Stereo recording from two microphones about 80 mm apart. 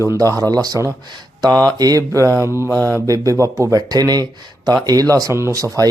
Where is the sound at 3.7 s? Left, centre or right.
Right.